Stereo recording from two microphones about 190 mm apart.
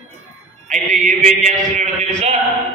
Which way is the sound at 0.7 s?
40° right (ahead or behind).